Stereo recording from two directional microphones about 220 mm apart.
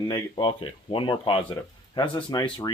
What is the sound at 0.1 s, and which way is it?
Speech, 25° left (ahead or behind).